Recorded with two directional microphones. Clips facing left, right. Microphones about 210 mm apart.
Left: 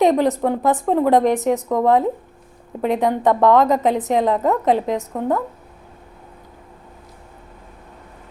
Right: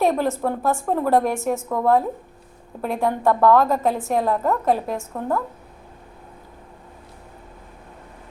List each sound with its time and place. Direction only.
0.0 s a woman's voice: 15° left (ahead or behind)